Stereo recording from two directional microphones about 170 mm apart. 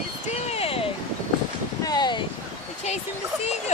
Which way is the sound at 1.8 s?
25° left (ahead or behind).